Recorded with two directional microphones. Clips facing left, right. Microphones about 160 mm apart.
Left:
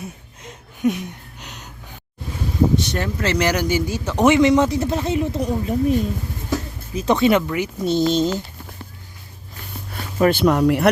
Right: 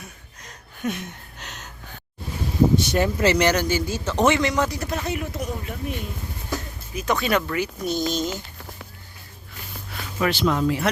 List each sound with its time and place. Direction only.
0.9 s a sound: 10° left (ahead or behind)
2.7 s speech: 5° right (ahead or behind)
3.3 s a man's voice: 5° left (ahead or behind); by 8.3 s 30° left (ahead or behind)
9.9 s speech: 50° left (ahead or behind); by 10.8 s 65° left (ahead or behind)